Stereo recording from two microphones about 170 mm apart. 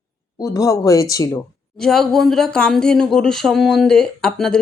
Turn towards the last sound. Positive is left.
turn(degrees=5)  # may be behind; listen again after turning